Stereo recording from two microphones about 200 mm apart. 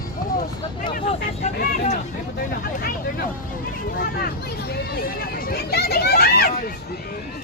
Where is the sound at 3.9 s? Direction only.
50° left (ahead or behind).